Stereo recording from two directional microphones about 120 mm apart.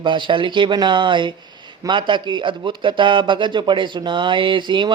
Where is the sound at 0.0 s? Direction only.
40° right (ahead or behind).